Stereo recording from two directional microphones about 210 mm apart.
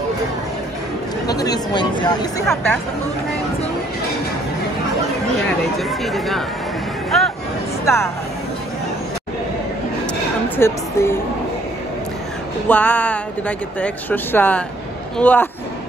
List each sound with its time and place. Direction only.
1.2 s speech: 20° left (ahead or behind)
2.4 s speech: centre (ahead or behind)
5.8 s speech: centre (ahead or behind)
7.1 s a sound: centre (ahead or behind)
7.8 s speech: 10° left (ahead or behind)
10.6 s speech: 10° left (ahead or behind)
12.6 s speech: 10° left (ahead or behind)